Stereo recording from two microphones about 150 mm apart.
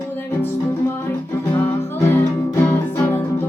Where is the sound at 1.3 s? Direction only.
15° left (ahead or behind).